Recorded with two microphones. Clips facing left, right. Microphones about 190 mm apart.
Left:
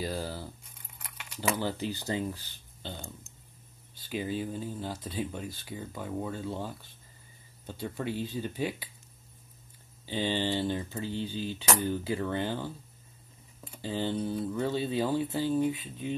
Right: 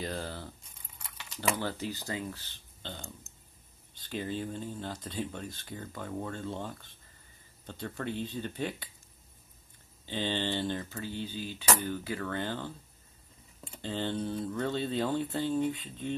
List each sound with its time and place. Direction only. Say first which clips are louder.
0.0 s speech: left 2 dB; 5° left (ahead or behind)
10.0 s speech: left 3 dB; 10° left (ahead or behind)
11.0 s cutlery: left 3 dB; 30° left (ahead or behind); by 12.7 s 10° left (ahead or behind)
13.7 s speech: left 2 dB; 5° left (ahead or behind)